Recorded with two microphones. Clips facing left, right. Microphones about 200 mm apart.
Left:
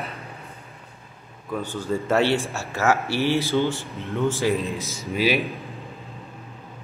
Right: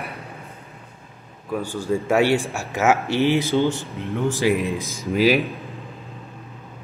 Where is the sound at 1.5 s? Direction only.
10° right (ahead or behind).